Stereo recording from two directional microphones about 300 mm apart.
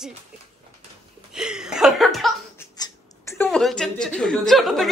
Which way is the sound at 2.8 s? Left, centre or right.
Centre.